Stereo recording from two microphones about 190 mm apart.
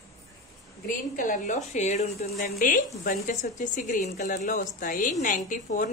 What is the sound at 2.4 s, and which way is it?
A woman's voice, 50° left (ahead or behind).